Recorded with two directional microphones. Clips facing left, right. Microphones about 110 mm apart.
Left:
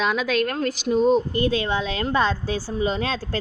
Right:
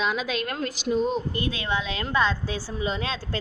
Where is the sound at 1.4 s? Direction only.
35° left (ahead or behind).